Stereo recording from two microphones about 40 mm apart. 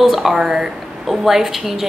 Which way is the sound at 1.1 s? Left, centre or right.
Centre.